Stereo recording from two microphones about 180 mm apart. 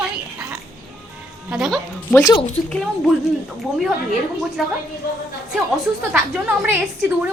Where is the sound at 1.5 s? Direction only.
5° right (ahead or behind).